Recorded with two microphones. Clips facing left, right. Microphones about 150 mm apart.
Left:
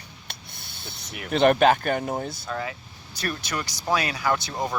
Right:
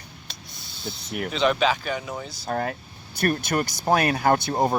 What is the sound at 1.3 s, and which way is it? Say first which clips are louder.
Speech: left 5 dB; 55° left (ahead or behind).